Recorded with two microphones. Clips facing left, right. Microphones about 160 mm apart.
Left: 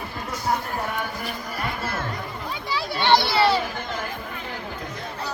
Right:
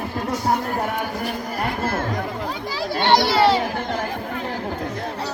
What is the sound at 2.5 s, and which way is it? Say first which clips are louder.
Children playing: right 3 dB; 45° right (ahead or behind).